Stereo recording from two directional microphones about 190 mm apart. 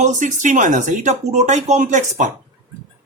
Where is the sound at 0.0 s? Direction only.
40° right (ahead or behind).